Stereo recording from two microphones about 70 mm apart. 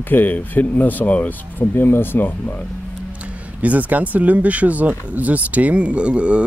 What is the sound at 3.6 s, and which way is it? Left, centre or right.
Speech, right.